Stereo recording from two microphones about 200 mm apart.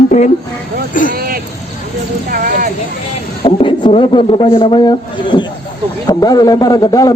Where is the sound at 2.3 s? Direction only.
45° right (ahead or behind).